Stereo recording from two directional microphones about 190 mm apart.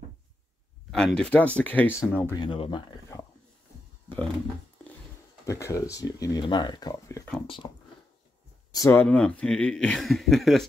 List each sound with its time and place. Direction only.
0.9 s speech: 5° left (ahead or behind)
2.4 s speech: 25° left (ahead or behind)
5.4 s speech: 15° left (ahead or behind)
8.7 s speech: 15° left (ahead or behind)
9.0 s speech: 5° left (ahead or behind)